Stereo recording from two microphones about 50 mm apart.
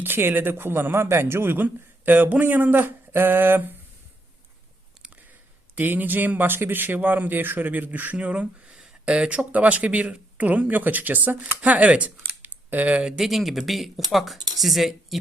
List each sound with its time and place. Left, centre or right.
0.0 s speech: right
1.5 s speech: right
5.7 s speech: right
8.2 s speech: right
13.1 s speech: centre